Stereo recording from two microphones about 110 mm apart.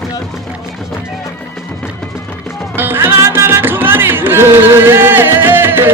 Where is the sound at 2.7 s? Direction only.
20° right (ahead or behind).